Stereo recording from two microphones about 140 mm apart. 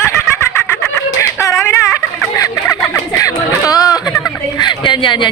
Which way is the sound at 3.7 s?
25° left (ahead or behind).